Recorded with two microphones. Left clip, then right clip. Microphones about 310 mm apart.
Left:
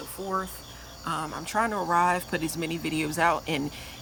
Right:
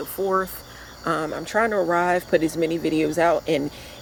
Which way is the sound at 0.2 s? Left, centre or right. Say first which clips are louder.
Right 11 dB; right.